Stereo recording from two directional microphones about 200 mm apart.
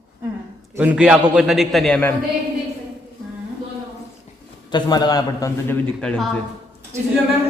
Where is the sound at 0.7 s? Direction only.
5° right (ahead or behind).